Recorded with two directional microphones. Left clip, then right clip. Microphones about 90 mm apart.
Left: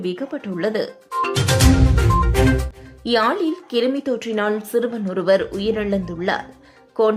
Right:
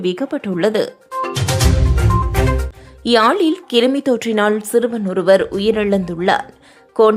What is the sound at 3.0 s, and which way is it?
Speech, 35° right (ahead or behind).